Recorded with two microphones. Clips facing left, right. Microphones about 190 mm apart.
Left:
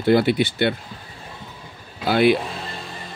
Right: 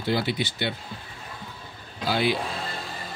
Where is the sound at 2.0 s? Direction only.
60° left (ahead or behind).